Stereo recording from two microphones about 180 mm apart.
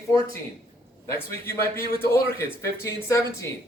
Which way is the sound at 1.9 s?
15° left (ahead or behind).